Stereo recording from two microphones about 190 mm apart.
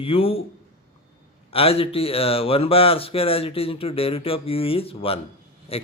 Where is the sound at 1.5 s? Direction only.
30° left (ahead or behind).